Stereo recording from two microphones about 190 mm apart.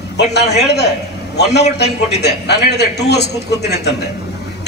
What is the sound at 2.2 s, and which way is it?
A man's voice, 60° left (ahead or behind).